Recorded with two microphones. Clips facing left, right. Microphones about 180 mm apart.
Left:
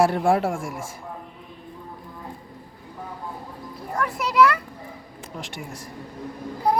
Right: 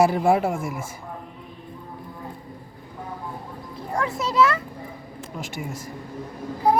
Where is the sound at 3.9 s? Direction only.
25° right (ahead or behind).